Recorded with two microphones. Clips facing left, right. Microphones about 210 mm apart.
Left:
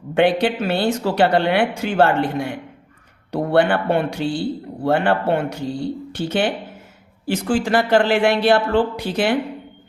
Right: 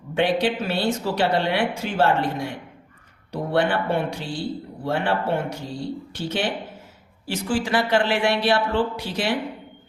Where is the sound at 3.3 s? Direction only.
60° left (ahead or behind).